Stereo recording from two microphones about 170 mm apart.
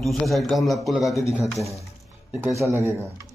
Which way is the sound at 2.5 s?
15° right (ahead or behind).